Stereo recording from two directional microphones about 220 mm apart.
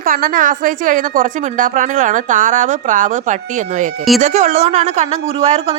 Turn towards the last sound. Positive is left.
turn(degrees=-30)  # may be behind; listen again after turning